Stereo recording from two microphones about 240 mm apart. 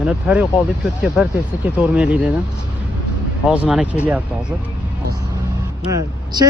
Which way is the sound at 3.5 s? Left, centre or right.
Centre.